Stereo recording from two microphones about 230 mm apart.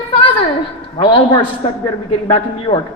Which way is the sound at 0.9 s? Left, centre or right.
Left.